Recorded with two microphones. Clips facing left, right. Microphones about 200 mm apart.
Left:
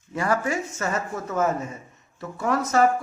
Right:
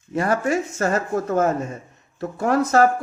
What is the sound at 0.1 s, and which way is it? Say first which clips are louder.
A woman's voice: right 4 dB; 25° right (ahead or behind).